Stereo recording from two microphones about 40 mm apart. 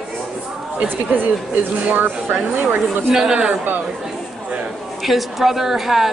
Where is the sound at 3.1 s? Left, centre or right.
Centre.